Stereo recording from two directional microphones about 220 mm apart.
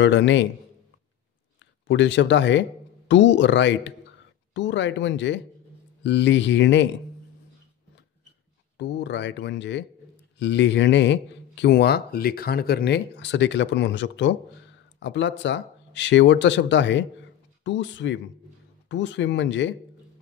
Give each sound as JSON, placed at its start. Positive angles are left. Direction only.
{"t": 0.0, "sound": "speech", "side_deg": 55}
{"t": 1.9, "sound": "speech", "side_deg": 55}
{"t": 8.7, "sound": "speech", "side_deg": 50}